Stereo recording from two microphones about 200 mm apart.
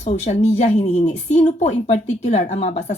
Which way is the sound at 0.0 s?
35° left (ahead or behind).